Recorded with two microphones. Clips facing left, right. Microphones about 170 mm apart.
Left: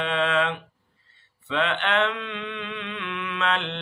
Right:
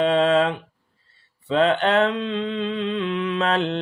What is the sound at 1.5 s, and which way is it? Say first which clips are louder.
Mantra: right 7 dB; 40° right (ahead or behind).